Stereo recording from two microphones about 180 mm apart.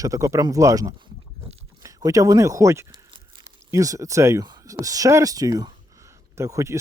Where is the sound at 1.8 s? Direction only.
20° right (ahead or behind).